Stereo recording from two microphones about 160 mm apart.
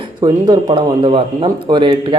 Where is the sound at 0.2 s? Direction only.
30° right (ahead or behind).